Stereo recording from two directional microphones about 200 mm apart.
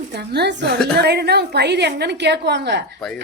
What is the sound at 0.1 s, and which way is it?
A woman's voice, 55° right (ahead or behind).